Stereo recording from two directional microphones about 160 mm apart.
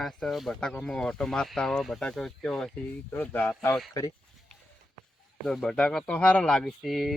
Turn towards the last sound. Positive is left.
turn(degrees=0)  # may be behind; listen again after turning